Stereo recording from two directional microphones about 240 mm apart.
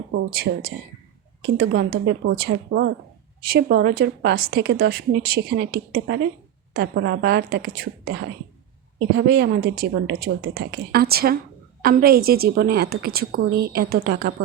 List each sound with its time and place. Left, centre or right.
0.1 s a woman's voice: right